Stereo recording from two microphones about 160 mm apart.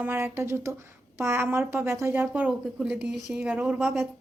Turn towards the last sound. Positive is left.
turn(degrees=-5)  # may be behind; listen again after turning